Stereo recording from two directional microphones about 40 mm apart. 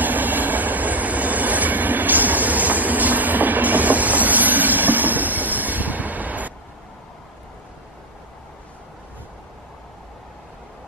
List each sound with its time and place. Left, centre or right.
0.0 s train: right